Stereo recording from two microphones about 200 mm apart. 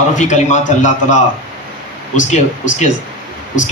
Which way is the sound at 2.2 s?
35° left (ahead or behind).